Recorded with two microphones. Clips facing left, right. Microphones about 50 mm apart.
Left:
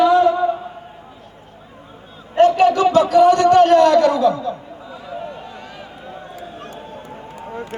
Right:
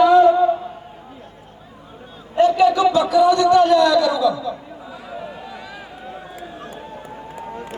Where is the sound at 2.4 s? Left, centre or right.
Left.